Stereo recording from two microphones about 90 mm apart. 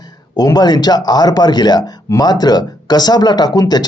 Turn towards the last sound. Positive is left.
turn(degrees=50)  # may be behind; listen again after turning